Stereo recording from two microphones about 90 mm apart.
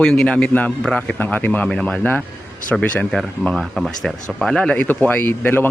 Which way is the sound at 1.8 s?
5° left (ahead or behind).